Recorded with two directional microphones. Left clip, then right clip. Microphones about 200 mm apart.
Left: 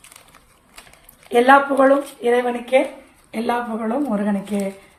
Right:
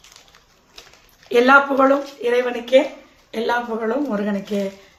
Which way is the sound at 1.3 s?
20° right (ahead or behind).